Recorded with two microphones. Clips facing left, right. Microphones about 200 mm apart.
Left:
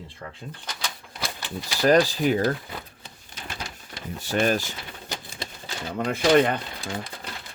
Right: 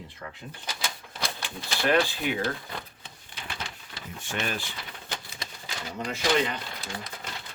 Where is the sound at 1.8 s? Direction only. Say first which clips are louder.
Left 6 dB; 40° left (ahead or behind).